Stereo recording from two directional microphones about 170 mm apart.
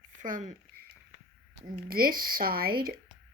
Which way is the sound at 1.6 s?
60° right (ahead or behind).